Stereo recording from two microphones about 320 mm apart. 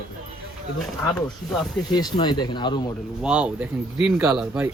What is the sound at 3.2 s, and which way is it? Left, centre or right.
Speech, centre.